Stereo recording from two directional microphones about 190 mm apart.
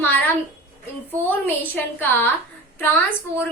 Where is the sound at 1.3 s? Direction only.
10° left (ahead or behind).